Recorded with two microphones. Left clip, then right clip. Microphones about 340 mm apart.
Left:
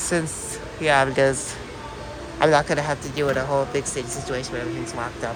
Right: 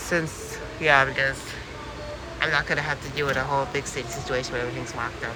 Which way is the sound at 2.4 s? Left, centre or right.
Centre.